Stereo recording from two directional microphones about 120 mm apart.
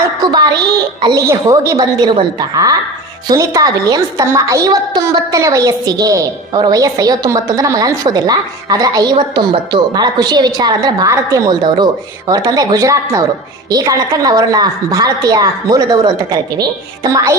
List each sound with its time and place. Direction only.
0.2 s a woman's voice: 35° right (ahead or behind)